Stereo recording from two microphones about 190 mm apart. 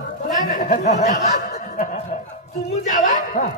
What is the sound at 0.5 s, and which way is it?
A man's voice, 40° left (ahead or behind).